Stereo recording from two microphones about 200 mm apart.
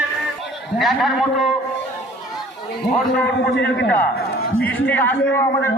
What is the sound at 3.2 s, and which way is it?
Speech, 60° left (ahead or behind).